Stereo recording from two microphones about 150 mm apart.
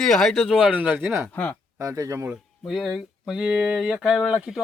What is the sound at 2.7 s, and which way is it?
Speech, centre (ahead or behind).